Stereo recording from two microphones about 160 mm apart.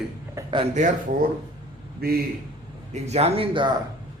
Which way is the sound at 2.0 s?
75° right (ahead or behind).